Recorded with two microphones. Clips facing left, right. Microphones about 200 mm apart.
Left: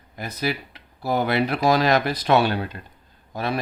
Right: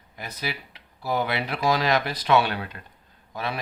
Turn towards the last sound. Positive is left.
turn(degrees=40)  # may be behind; listen again after turning